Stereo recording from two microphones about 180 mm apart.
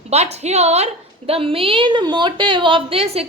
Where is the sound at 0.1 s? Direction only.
35° right (ahead or behind).